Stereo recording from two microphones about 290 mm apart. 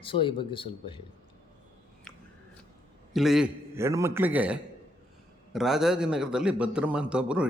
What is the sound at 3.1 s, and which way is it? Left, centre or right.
A man's voice, centre.